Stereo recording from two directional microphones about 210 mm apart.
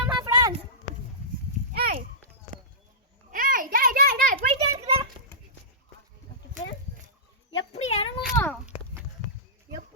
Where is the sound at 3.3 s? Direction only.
40° right (ahead or behind).